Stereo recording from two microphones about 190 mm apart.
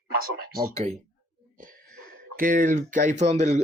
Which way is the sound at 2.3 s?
45° right (ahead or behind).